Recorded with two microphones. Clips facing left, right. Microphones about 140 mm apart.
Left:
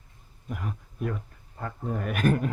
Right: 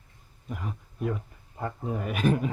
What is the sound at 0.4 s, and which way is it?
A woman's voice, centre (ahead or behind).